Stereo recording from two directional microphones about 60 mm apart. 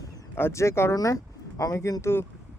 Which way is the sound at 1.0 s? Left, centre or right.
Left.